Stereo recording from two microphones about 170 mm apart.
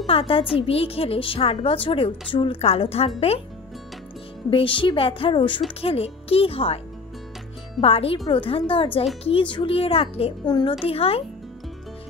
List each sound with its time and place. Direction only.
0.0 s a woman's voice: 30° left (ahead or behind)
4.5 s a woman's voice: 30° left (ahead or behind)
7.8 s a woman's voice: 35° left (ahead or behind)